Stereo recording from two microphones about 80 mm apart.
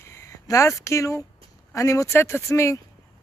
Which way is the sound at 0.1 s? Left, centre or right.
Left.